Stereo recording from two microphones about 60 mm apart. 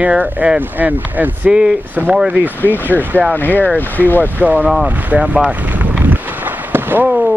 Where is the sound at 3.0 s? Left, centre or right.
Right.